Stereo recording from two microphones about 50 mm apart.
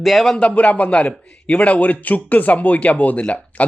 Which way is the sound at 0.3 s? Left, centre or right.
Left.